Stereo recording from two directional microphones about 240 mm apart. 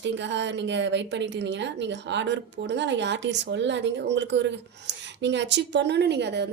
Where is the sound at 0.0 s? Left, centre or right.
Right.